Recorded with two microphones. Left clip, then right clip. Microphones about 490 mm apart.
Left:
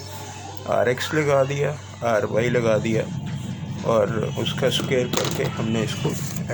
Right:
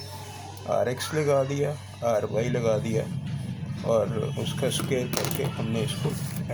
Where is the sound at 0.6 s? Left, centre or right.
Right.